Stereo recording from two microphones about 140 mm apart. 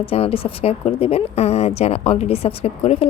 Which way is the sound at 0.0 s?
45° left (ahead or behind).